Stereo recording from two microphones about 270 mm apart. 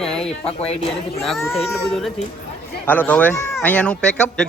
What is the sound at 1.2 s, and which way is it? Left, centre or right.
A man's voice, centre.